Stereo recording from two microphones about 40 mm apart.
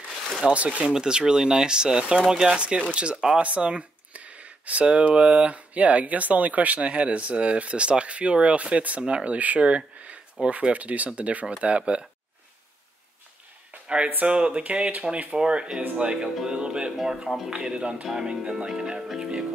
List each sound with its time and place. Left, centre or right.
0.1 s a sound: centre
0.5 s speech: right
0.9 s speech: centre
13.8 s speech: right
15.3 s speech: right
16.9 s speech: centre
17.5 s speech: right